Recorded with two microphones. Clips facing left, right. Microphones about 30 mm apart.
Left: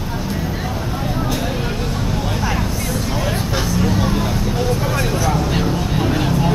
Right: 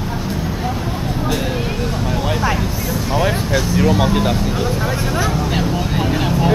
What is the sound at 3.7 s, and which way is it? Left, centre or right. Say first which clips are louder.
Vehicle: right 4 dB; centre.